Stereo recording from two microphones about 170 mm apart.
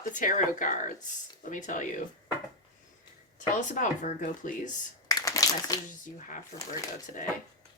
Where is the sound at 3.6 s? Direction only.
45° left (ahead or behind).